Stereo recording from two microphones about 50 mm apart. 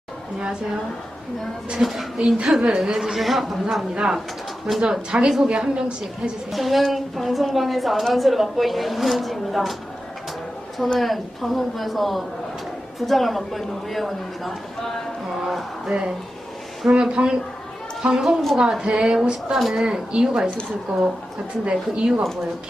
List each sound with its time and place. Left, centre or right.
1.8 s a woman's voice: centre
2.1 s a woman's voice: centre
3.9 s a woman's voice: centre
6.5 s a woman's voice: centre
11.0 s a woman's voice: centre
15.9 s a woman's voice: centre
19.5 s a woman's voice: centre
19.8 s a woman's voice: centre
21.6 s speech: right